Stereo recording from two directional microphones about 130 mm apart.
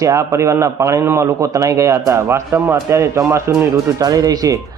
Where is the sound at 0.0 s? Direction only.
25° right (ahead or behind).